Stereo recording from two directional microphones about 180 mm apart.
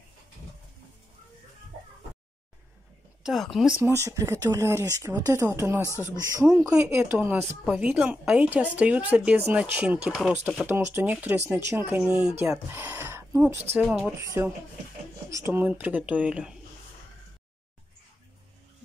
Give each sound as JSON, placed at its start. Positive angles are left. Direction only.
{"t": 3.3, "sound": "speech", "side_deg": 0}
{"t": 3.8, "sound": "a woman's voice", "side_deg": -15}
{"t": 13.7, "sound": "speech", "side_deg": 0}
{"t": 14.2, "sound": "a woman's voice", "side_deg": -15}